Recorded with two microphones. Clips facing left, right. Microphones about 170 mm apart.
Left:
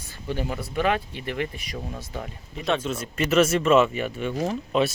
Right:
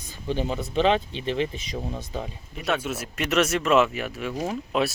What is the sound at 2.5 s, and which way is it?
Speech, 5° right (ahead or behind).